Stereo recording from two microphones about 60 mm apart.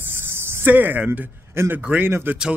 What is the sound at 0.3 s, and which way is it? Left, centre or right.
Spray, right.